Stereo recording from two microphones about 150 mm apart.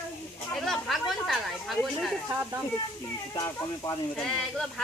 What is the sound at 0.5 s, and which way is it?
Speech, centre (ahead or behind).